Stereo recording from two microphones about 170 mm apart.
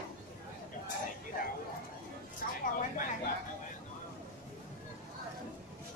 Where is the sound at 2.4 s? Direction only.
60° left (ahead or behind).